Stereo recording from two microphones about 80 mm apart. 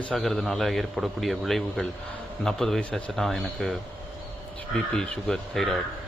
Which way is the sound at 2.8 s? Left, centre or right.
Centre.